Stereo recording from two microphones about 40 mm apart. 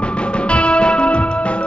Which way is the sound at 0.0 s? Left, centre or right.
Left.